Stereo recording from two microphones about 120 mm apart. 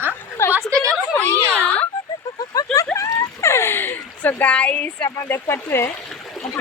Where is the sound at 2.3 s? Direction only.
30° left (ahead or behind); by 5.1 s 15° left (ahead or behind).